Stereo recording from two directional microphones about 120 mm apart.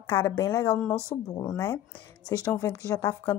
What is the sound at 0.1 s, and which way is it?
A woman's voice, 20° left (ahead or behind).